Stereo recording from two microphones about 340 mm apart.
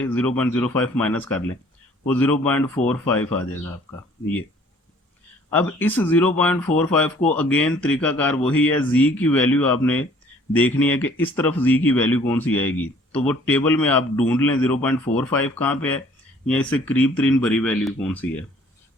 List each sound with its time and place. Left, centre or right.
0.0 s a man's voice: centre
5.5 s a man's voice: centre